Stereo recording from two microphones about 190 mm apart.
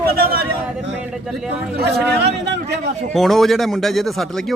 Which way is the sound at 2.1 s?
60° right (ahead or behind).